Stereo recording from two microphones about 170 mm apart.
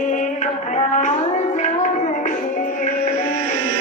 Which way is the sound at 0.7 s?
45° left (ahead or behind).